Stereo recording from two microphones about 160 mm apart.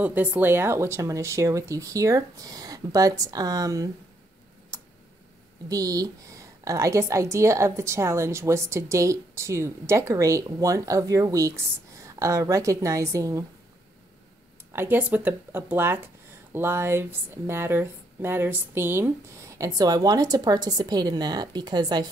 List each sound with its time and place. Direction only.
0.0 s a woman's voice: 10° right (ahead or behind)
4.7 s tick: 20° right (ahead or behind)
5.7 s a woman's voice: 20° right (ahead or behind)
14.7 s a woman's voice: 15° right (ahead or behind)